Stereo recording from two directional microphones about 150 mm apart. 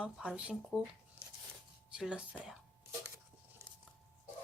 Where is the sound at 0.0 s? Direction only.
5° right (ahead or behind).